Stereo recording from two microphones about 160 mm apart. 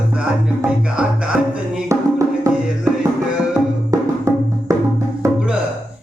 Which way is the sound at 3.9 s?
20° right (ahead or behind).